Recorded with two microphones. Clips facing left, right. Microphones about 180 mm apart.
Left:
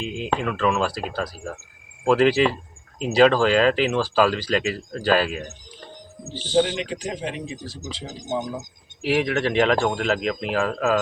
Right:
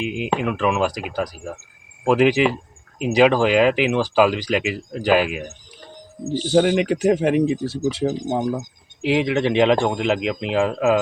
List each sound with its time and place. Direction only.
0.0 s speech: 15° right (ahead or behind)
6.7 s speech: 60° right (ahead or behind)
9.0 s speech: 20° right (ahead or behind)